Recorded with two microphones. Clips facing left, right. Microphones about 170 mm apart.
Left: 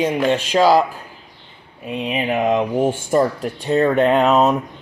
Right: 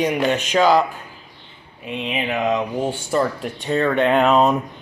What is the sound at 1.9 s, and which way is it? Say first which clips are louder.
Speech: left 3 dB; 40° left (ahead or behind).